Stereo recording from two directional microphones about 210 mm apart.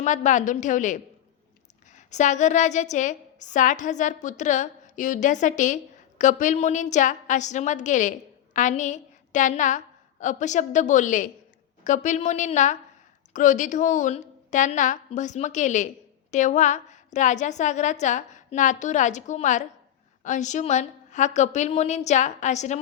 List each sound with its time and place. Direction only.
0.0 s a woman's voice: 35° left (ahead or behind)